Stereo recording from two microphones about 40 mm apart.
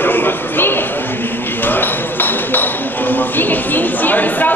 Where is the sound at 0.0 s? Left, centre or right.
Left.